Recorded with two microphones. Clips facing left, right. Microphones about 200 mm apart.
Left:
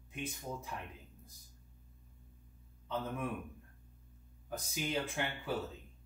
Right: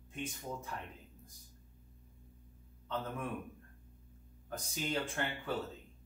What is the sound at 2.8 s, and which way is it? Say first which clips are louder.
Speech: left 1 dB; 10° left (ahead or behind).